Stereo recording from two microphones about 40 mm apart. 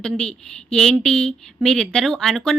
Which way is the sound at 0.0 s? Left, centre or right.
Centre.